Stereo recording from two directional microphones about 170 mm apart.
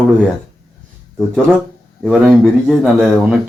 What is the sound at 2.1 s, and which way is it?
A man's voice, 5° right (ahead or behind).